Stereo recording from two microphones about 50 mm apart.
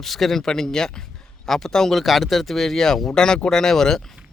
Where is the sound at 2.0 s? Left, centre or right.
Centre.